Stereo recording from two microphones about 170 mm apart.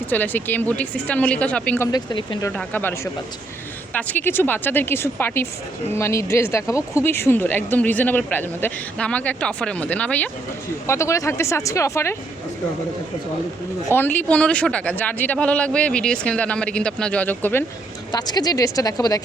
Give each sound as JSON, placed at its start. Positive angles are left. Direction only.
{"t": 0.1, "sound": "speech", "side_deg": 10}
{"t": 1.9, "sound": "a woman's voice", "side_deg": 25}
{"t": 2.5, "sound": "speech", "side_deg": 10}
{"t": 13.9, "sound": "speech", "side_deg": 10}
{"t": 18.1, "sound": "a woman's voice", "side_deg": 25}